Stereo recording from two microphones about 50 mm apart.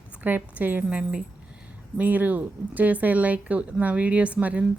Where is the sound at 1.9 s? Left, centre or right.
Right.